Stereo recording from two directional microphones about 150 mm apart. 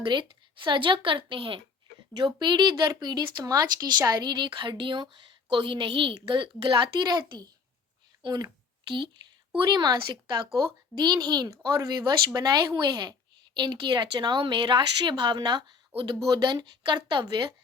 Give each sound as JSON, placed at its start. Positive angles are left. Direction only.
{"t": 0.0, "sound": "speech", "side_deg": -30}
{"t": 9.6, "sound": "speech", "side_deg": -25}